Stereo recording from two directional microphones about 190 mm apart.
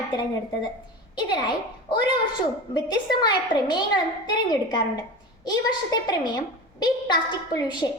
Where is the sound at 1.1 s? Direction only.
25° left (ahead or behind).